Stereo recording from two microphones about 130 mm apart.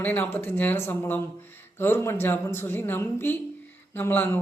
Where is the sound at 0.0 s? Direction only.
15° left (ahead or behind).